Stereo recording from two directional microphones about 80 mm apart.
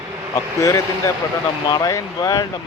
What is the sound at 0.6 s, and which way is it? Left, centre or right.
Speech, left.